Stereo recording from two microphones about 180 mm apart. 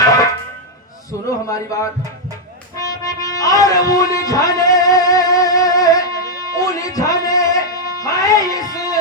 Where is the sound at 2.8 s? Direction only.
20° left (ahead or behind).